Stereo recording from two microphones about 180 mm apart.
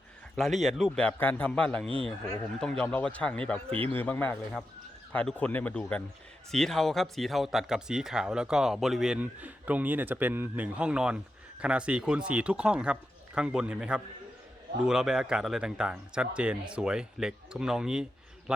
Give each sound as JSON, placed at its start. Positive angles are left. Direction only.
{"t": 0.3, "sound": "speech", "side_deg": 0}